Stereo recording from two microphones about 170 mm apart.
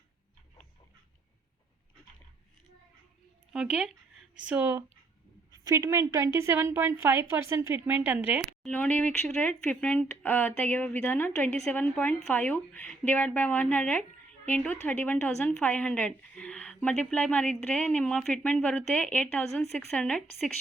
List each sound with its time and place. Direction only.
3.5 s a woman's voice: 5° right (ahead or behind)
8.6 s a woman's voice: 5° left (ahead or behind)